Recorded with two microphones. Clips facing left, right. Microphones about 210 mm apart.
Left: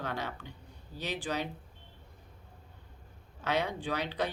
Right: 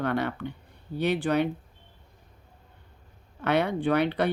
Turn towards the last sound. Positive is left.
turn(degrees=-60)  # may be behind; listen again after turning